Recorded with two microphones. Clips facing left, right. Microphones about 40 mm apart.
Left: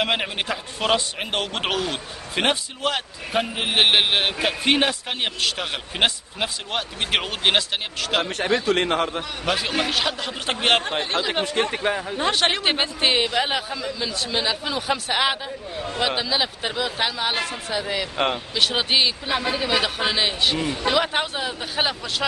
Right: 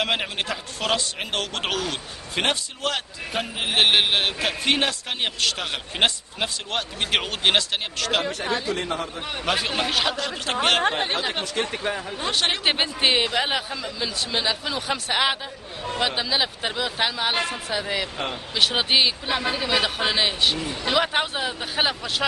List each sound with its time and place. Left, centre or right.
0.0 s a man's voice: centre
8.2 s a man's voice: left
9.4 s a man's voice: centre
10.1 s a man's voice: centre
10.8 s speech: right
11.1 s speech: centre
11.4 s speech: left; by 12.2 s centre
12.6 s a man's voice: centre
18.1 s speech: left
18.5 s a man's voice: centre